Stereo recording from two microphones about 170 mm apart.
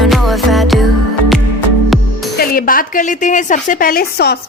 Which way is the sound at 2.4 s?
55° left (ahead or behind).